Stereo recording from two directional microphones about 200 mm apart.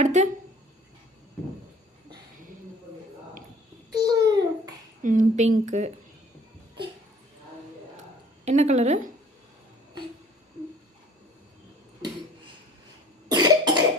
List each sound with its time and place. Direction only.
0.0 s speech: 35° right (ahead or behind)
3.9 s babbling: 20° right (ahead or behind)
5.0 s speech: 40° right (ahead or behind)
8.4 s speech: 35° right (ahead or behind)
13.2 s cough: 20° right (ahead or behind)